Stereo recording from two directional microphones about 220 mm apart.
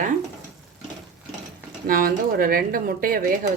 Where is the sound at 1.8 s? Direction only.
40° right (ahead or behind).